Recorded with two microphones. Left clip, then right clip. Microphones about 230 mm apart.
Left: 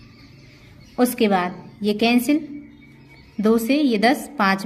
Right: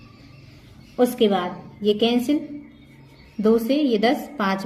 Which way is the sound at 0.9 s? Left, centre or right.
Left.